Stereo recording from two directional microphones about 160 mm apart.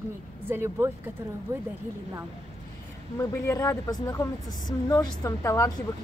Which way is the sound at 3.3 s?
15° left (ahead or behind).